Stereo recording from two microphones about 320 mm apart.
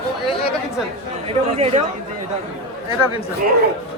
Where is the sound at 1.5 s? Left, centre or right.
Centre.